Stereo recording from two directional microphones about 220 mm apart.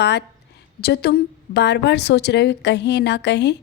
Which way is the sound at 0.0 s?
50° left (ahead or behind).